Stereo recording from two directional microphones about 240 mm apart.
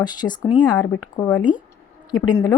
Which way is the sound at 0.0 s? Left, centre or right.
Centre.